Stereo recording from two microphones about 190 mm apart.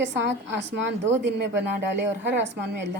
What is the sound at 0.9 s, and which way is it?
A woman's voice, 65° right (ahead or behind).